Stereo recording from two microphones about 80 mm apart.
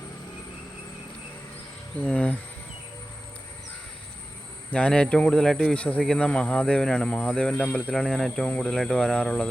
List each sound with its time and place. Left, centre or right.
2.0 s a man's voice: centre
4.7 s a man's voice: centre